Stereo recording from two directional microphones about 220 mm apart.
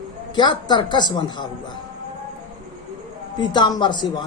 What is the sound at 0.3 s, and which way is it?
A man's voice, 20° left (ahead or behind).